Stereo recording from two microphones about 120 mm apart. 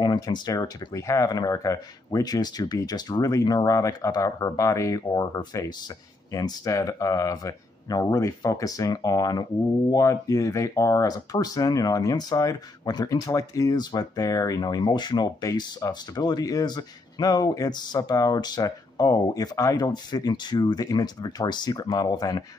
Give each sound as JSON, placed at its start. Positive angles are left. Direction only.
{"t": 0.0, "sound": "speech", "side_deg": 35}